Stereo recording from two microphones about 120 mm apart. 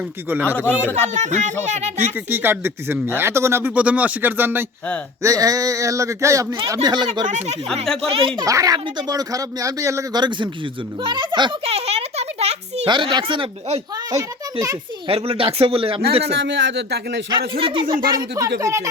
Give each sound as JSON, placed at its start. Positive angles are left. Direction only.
{"t": 0.4, "sound": "a man's voice", "side_deg": 15}
{"t": 1.1, "sound": "speech", "side_deg": -75}
{"t": 2.0, "sound": "speech", "side_deg": -15}
{"t": 5.2, "sound": "speech", "side_deg": -30}
{"t": 6.8, "sound": "speech", "side_deg": -40}
{"t": 7.3, "sound": "speech", "side_deg": -75}
{"t": 8.1, "sound": "speech", "side_deg": -50}
{"t": 8.4, "sound": "speech", "side_deg": -30}
{"t": 11.6, "sound": "a sound", "side_deg": -60}
{"t": 12.9, "sound": "speech", "side_deg": -40}
{"t": 15.0, "sound": "speech", "side_deg": -50}
{"t": 17.2, "sound": "speech", "side_deg": -40}